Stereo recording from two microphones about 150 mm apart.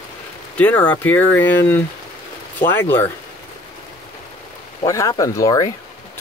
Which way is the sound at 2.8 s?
15° left (ahead or behind).